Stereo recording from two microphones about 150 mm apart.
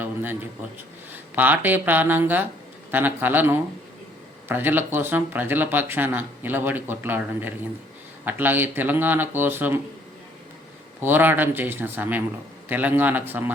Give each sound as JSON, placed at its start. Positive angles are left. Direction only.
{"t": 0.0, "sound": "a sound", "side_deg": -10}
{"t": 1.1, "sound": "speech", "side_deg": -10}
{"t": 11.0, "sound": "speech", "side_deg": -15}